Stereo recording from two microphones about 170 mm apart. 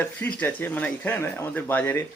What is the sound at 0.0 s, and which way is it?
Speech, 10° left (ahead or behind).